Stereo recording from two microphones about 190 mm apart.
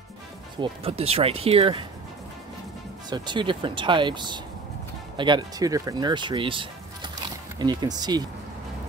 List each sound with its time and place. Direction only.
0.6 s speech: 30° right (ahead or behind)
3.1 s speech: 25° right (ahead or behind)